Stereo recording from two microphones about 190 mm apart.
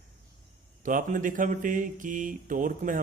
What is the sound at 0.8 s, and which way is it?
A man's voice, 45° right (ahead or behind).